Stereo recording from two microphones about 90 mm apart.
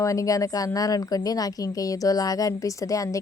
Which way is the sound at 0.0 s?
40° left (ahead or behind).